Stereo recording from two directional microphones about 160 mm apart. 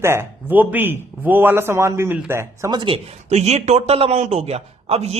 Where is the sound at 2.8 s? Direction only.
35° right (ahead or behind).